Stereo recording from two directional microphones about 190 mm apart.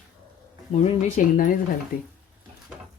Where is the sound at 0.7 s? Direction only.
40° left (ahead or behind).